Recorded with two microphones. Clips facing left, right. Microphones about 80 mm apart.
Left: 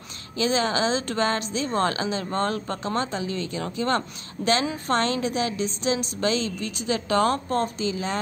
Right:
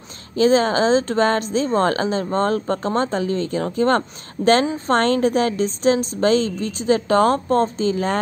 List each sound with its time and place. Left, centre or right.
0.4 s a woman's voice: right